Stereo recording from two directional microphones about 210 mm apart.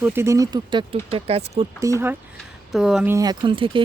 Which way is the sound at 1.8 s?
15° right (ahead or behind).